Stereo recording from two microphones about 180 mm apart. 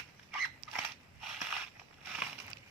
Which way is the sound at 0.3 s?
Centre (ahead or behind).